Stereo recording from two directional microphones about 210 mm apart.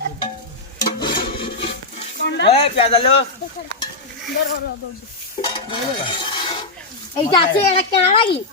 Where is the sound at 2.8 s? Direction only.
30° left (ahead or behind).